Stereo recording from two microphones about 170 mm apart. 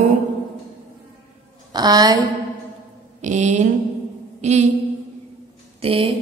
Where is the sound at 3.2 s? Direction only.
45° right (ahead or behind).